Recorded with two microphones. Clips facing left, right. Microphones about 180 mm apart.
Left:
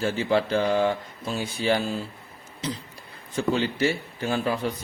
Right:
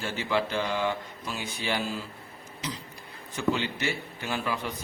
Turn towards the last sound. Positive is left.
turn(degrees=35)  # may be behind; listen again after turning